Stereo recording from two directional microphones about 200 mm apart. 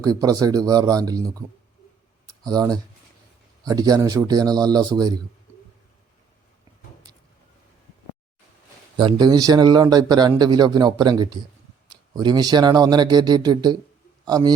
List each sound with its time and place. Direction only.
0.0 s speech: 20° right (ahead or behind)
2.2 s a sound: 20° right (ahead or behind)
3.6 s speech: 20° right (ahead or behind)
9.0 s speech: 20° right (ahead or behind)